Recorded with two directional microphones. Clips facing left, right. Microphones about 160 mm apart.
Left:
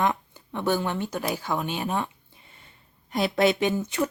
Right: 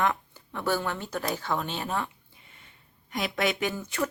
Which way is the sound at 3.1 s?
30° left (ahead or behind).